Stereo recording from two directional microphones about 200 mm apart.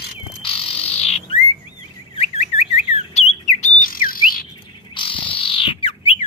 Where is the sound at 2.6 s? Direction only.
30° left (ahead or behind).